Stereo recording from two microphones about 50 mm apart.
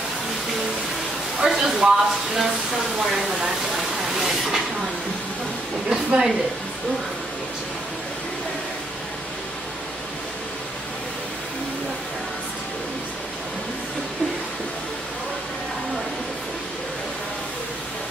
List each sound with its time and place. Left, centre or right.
1.4 s speech: centre
3.2 s a sound: centre
5.9 s speech: centre